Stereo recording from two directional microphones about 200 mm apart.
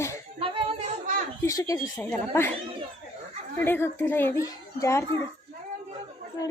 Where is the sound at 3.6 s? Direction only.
10° left (ahead or behind).